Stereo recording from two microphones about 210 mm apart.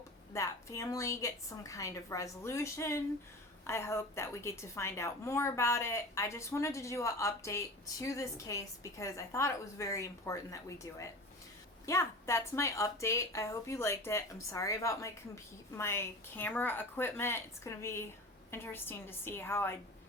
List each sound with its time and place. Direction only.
0.3 s a woman's voice: 15° left (ahead or behind)
11.9 s a woman's voice: 15° left (ahead or behind)